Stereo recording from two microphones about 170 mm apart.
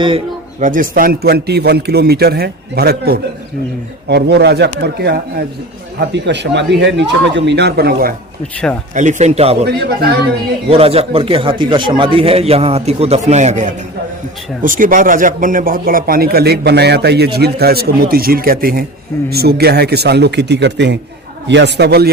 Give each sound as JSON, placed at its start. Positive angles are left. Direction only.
{"t": 0.6, "sound": "a man's voice", "side_deg": -50}
{"t": 4.1, "sound": "a man's voice", "side_deg": -75}
{"t": 6.2, "sound": "a man's voice", "side_deg": -90}
{"t": 9.0, "sound": "a man's voice", "side_deg": -45}
{"t": 9.6, "sound": "a man's voice", "side_deg": -70}
{"t": 10.7, "sound": "a man's voice", "side_deg": -35}